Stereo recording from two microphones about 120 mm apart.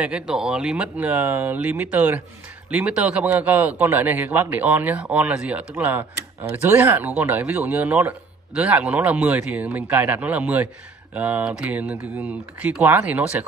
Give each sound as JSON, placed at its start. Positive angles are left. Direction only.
{"t": 0.0, "sound": "a man's voice", "side_deg": -5}